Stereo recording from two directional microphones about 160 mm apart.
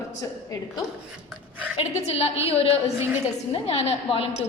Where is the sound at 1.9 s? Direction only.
40° left (ahead or behind).